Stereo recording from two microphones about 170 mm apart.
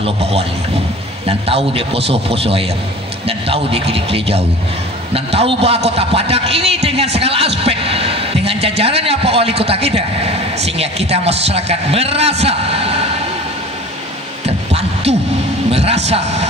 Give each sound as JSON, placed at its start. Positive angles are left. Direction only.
{"t": 0.0, "sound": "a man's voice", "side_deg": -35}
{"t": 14.4, "sound": "heart sounds", "side_deg": -35}
{"t": 15.7, "sound": "a man's voice", "side_deg": -40}